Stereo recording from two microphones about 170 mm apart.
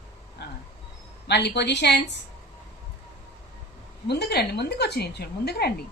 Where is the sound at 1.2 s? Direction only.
80° left.